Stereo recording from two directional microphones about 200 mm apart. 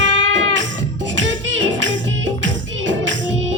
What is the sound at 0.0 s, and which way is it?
Music, 65° right (ahead or behind).